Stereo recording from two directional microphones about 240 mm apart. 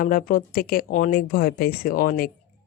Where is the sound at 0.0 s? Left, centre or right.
Left.